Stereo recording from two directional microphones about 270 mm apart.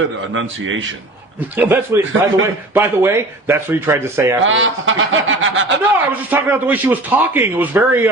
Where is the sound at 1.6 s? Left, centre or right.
Centre.